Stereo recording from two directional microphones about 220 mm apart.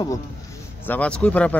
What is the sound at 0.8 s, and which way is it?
Speech, 5° left (ahead or behind).